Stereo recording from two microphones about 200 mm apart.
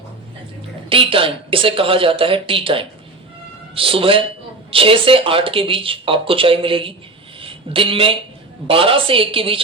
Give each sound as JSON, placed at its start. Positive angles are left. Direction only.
{"t": 0.9, "sound": "speech", "side_deg": -25}